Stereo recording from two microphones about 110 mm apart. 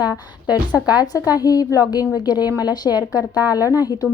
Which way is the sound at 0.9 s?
35° left (ahead or behind).